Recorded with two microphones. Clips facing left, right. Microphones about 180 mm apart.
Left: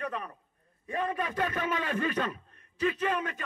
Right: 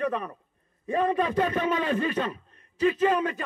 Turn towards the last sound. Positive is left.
turn(degrees=-30)  # may be behind; listen again after turning